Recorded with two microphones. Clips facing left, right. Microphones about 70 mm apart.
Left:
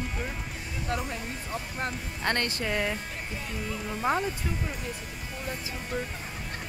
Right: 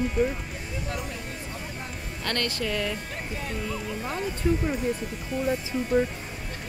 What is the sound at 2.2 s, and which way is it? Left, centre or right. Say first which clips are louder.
Speech: even; left.